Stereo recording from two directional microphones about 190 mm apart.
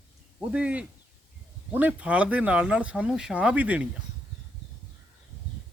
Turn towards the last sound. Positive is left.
turn(degrees=-5)  # may be behind; listen again after turning